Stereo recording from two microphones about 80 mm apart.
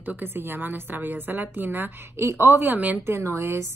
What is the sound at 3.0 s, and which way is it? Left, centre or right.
Speech, right.